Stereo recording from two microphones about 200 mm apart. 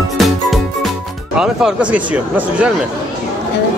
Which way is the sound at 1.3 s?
5° right (ahead or behind).